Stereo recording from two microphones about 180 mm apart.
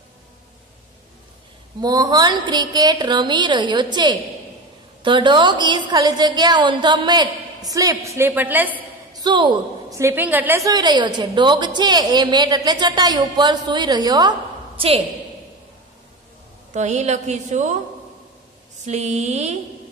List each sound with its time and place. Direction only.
1.8 s a woman's voice: 20° right (ahead or behind)
9.1 s a woman's voice: 25° right (ahead or behind)
14.8 s a woman's voice: 35° right (ahead or behind)
16.7 s a woman's voice: 40° right (ahead or behind)
18.9 s a woman's voice: 40° right (ahead or behind)